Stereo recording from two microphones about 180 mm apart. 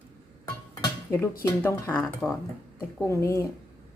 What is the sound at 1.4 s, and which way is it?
Speech, 10° left (ahead or behind).